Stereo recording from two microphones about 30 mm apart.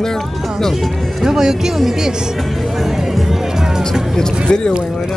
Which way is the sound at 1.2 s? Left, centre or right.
Centre.